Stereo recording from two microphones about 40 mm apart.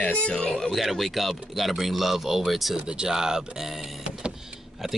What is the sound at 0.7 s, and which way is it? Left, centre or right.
Speech, centre.